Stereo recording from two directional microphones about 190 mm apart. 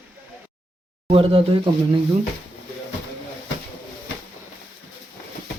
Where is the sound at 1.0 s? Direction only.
30° right (ahead or behind).